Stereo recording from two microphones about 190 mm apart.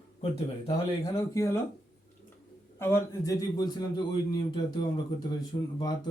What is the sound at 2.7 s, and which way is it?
A man's voice, 15° left (ahead or behind).